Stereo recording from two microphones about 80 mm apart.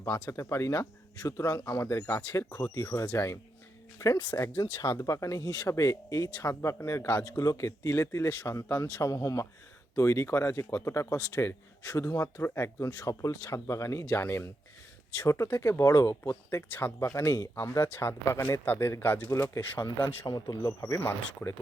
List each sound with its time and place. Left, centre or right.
0.0 s speech: left
4.8 s speech: left
7.3 s speech: left
16.7 s speech: left
19.3 s speech: left
20.1 s a man's voice: left
20.8 s speech: left